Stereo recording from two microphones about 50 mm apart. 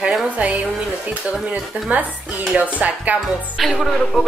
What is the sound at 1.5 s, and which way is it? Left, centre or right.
Music, right.